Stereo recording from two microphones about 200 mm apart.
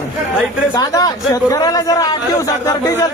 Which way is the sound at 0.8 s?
20° left (ahead or behind).